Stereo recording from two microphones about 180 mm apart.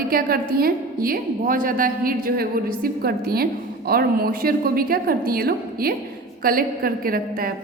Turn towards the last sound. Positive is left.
turn(degrees=-55)  # may be behind; listen again after turning